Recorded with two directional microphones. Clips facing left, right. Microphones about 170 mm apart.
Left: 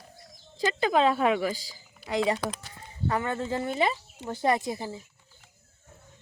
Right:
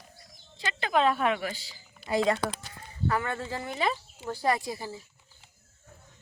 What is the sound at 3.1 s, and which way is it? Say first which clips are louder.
Speech: left 3 dB; 20° left (ahead or behind).